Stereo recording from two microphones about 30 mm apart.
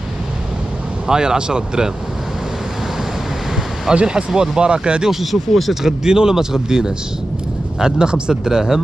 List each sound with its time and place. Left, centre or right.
1.0 s speech: right
3.9 s speech: right
5.1 s speech: centre
5.9 s speech: right